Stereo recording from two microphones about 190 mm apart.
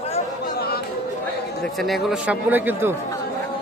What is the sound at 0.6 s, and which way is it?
Speech, 55° left (ahead or behind).